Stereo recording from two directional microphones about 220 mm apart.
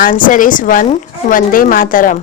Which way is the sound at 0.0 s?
35° left (ahead or behind).